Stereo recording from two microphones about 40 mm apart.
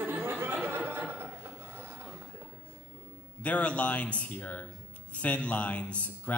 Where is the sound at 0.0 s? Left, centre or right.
Right.